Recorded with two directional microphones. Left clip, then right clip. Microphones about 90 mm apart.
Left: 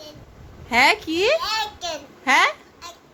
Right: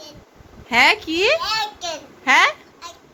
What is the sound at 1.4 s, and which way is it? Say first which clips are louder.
Speech: right 2 dB; 5° left (ahead or behind).